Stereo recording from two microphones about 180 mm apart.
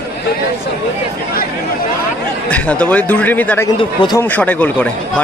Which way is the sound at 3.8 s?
25° left (ahead or behind).